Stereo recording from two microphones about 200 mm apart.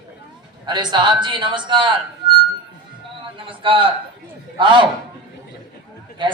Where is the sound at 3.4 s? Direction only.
25° right (ahead or behind).